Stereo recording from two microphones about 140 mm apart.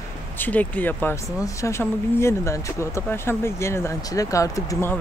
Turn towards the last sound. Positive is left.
turn(degrees=20)  # may be behind; listen again after turning